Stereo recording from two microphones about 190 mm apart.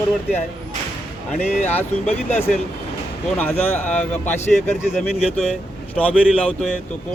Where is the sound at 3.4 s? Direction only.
10° left (ahead or behind).